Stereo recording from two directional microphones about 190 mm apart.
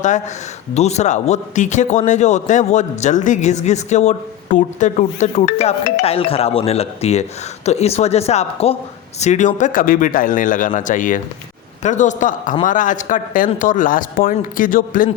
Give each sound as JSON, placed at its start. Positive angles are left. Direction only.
{"t": 0.7, "sound": "a man's voice", "side_deg": 35}